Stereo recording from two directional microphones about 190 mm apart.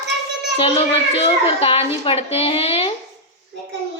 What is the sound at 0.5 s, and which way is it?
A child's voice, 30° left (ahead or behind).